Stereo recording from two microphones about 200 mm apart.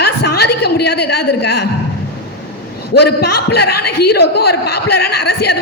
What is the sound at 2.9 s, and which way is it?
A woman's voice, 55° left (ahead or behind).